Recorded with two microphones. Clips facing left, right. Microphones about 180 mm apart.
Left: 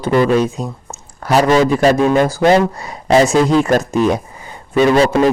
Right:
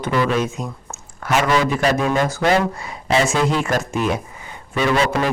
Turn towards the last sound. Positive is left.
turn(degrees=35)  # may be behind; listen again after turning